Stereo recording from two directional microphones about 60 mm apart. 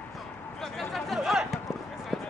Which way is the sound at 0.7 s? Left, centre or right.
Centre.